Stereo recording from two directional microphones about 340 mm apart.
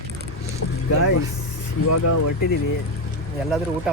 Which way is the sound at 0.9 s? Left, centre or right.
Left.